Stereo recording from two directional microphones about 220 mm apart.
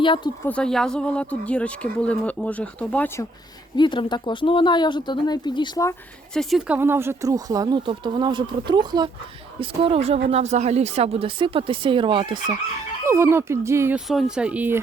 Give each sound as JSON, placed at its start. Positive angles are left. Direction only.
{"t": 0.4, "sound": "speech", "side_deg": 5}
{"t": 3.8, "sound": "speech", "side_deg": 20}
{"t": 6.3, "sound": "speech", "side_deg": 0}